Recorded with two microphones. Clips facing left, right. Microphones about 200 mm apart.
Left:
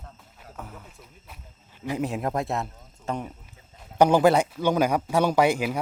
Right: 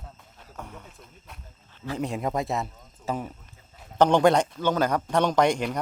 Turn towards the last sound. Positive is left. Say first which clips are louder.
# left 1 dB
turn(degrees=5)  # may be behind; listen again after turning